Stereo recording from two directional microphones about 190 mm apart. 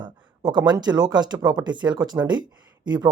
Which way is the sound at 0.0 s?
20° right (ahead or behind).